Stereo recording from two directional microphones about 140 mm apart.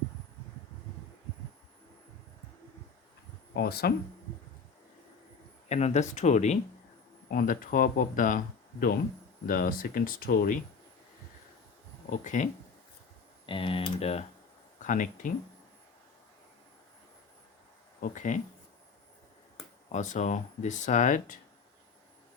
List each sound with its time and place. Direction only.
3.6 s speech: 90° left
5.6 s speech: 55° left (ahead or behind)
7.3 s speech: 90° left
12.1 s speech: 65° left (ahead or behind)
13.4 s speech: 40° left (ahead or behind)
14.8 s speech: 70° left (ahead or behind)
18.0 s speech: 60° left (ahead or behind)
19.9 s speech: 60° left (ahead or behind)